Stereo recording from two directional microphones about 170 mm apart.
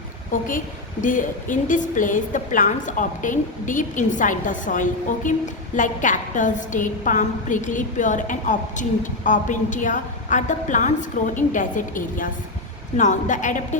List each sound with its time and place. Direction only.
0.3 s a woman's voice: 50° left (ahead or behind)